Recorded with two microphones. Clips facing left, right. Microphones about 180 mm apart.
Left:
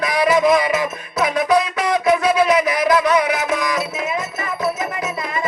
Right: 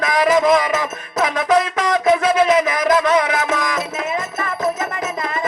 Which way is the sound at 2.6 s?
45° right (ahead or behind).